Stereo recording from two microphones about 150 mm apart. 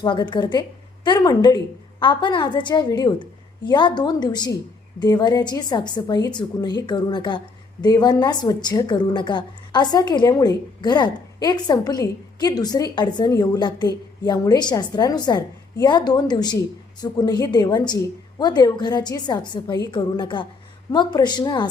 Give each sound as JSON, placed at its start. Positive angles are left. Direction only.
{"t": 0.0, "sound": "a woman's voice", "side_deg": 30}